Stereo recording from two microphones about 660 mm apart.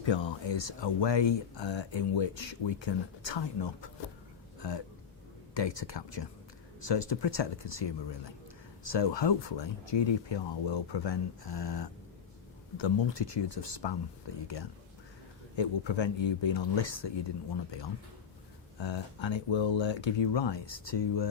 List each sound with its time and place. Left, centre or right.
0.0 s speech: left
5.5 s speech: left
15.5 s speech: left